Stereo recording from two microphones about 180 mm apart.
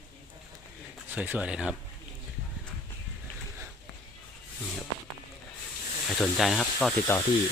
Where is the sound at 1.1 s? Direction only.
10° right (ahead or behind).